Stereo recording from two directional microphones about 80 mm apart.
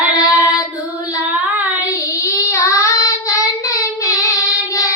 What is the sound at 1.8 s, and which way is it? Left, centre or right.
Child singing, left.